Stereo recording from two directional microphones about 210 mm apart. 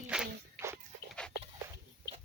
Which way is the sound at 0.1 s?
10° right (ahead or behind).